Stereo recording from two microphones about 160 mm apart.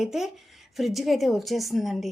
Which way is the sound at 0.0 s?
Centre (ahead or behind).